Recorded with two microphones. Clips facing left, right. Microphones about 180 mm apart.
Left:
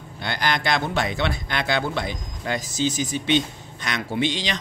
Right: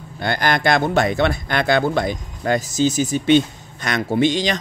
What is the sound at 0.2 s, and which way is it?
A man's voice, 50° right (ahead or behind).